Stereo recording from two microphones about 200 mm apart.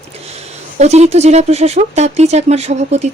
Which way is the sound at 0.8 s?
35° right (ahead or behind).